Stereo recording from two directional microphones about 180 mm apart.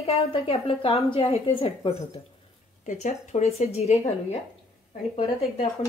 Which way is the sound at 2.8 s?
40° left (ahead or behind).